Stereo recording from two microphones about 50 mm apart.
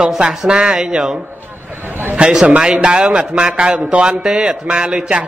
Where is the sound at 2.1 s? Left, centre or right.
Centre.